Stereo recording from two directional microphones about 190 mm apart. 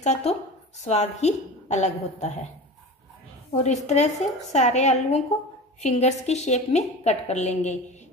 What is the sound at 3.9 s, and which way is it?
A woman's voice, 35° left (ahead or behind).